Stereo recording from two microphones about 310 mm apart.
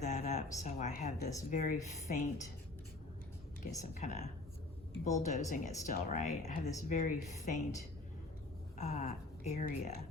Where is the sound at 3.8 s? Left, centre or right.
Left.